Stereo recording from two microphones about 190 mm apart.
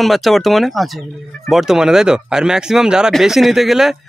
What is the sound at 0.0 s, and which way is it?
Speech, centre (ahead or behind).